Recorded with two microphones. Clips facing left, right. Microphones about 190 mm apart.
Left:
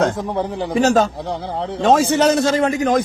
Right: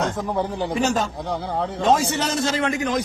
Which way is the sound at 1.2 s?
25° left (ahead or behind).